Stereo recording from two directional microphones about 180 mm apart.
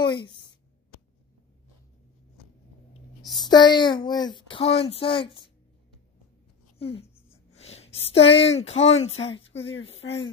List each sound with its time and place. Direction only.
0.0 s a woman's voice: 25° left (ahead or behind)
3.3 s speech: 25° left (ahead or behind)
6.8 s speech: 30° left (ahead or behind)
9.1 s speech: 90° left